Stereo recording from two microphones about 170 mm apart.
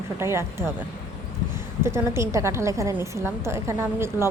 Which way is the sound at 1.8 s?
15° right (ahead or behind).